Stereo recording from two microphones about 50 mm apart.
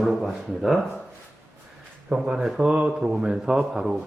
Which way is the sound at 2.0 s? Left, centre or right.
Right.